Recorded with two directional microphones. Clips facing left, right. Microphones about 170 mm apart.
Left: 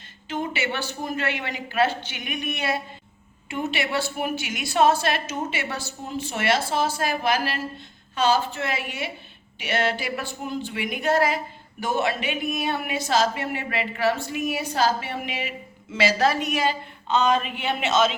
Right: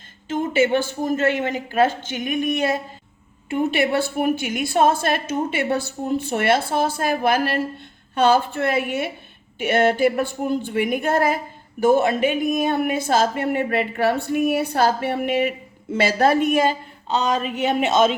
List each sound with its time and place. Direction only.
0.3 s a woman's voice: 45° right (ahead or behind)